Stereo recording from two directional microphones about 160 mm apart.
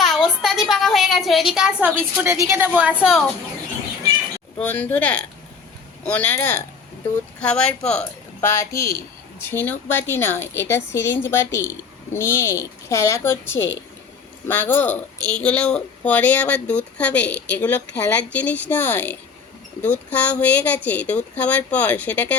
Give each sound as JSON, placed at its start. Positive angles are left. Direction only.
{"t": 0.0, "sound": "a woman's voice", "side_deg": 0}
{"t": 2.0, "sound": "a woman's voice", "side_deg": -15}
{"t": 4.6, "sound": "speech", "side_deg": 10}
{"t": 14.4, "sound": "speech", "side_deg": 15}
{"t": 17.2, "sound": "a woman's voice", "side_deg": 90}
{"t": 17.6, "sound": "speech", "side_deg": 10}